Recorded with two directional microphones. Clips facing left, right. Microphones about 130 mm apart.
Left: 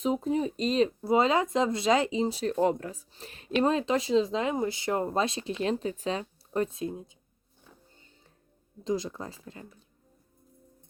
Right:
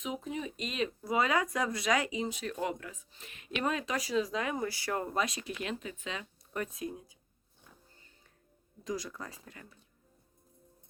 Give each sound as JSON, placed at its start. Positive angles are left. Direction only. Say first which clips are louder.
{"t": 0.0, "sound": "speech", "louder": "left 10 dB", "side_deg": 35}
{"t": 8.8, "sound": "speech", "louder": "left 7 dB", "side_deg": 25}